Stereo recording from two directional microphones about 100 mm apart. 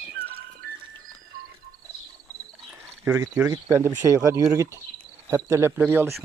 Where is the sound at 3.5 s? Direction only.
30° right (ahead or behind).